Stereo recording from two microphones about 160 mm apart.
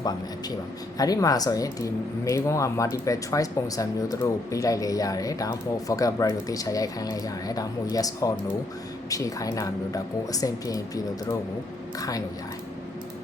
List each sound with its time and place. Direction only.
0.9 s speech: 20° left (ahead or behind)